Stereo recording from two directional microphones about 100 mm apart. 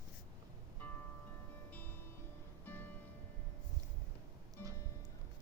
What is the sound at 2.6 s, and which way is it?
Music, 20° left (ahead or behind).